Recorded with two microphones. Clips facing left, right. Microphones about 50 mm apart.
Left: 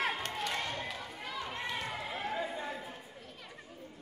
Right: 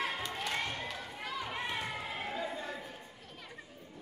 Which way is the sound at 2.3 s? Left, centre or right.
Centre.